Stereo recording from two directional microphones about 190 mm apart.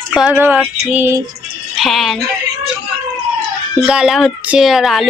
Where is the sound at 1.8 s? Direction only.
Centre (ahead or behind).